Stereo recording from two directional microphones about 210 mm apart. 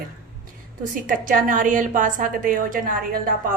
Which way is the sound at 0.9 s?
40° right (ahead or behind).